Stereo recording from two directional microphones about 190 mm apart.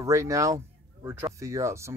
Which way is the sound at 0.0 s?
15° right (ahead or behind).